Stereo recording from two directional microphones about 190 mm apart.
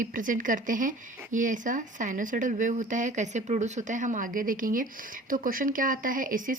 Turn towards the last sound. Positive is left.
turn(degrees=-45)  # may be behind; listen again after turning